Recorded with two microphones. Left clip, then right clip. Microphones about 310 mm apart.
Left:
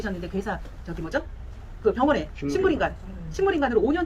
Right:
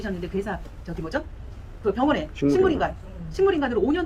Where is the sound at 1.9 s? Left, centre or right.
Centre.